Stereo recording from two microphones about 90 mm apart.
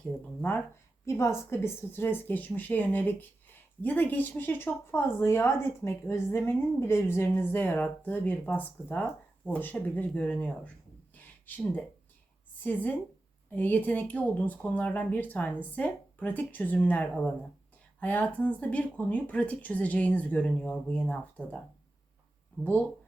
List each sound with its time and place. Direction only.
0.0 s speech: 20° left (ahead or behind)
11.1 s a sound: 20° left (ahead or behind)
12.6 s speech: 20° left (ahead or behind)